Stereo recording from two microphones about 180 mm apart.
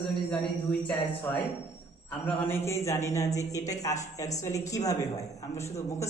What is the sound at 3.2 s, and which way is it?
Speech, 40° left (ahead or behind).